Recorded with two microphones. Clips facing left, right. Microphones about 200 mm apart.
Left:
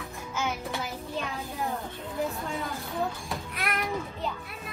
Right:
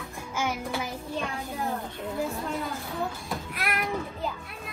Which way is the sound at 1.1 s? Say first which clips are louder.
Right 2 dB; centre (ahead or behind).